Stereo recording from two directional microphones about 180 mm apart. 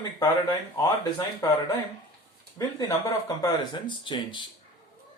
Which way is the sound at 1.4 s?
20° left (ahead or behind).